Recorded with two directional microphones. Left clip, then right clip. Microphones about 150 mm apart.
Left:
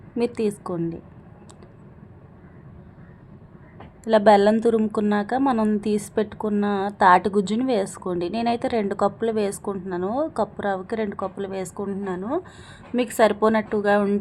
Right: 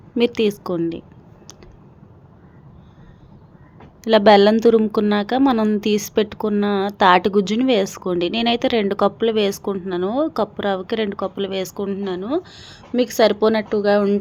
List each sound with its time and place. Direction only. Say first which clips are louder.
0.2 s a woman's voice: right 6 dB; 25° right (ahead or behind)
4.0 s a woman's voice: right 4 dB; 25° right (ahead or behind)